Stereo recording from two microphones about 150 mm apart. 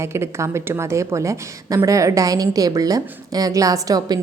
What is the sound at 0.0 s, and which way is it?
A woman's voice, 15° right (ahead or behind).